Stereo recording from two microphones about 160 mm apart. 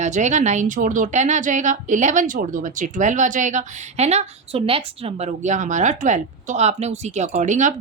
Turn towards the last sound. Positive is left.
turn(degrees=-50)  # may be behind; listen again after turning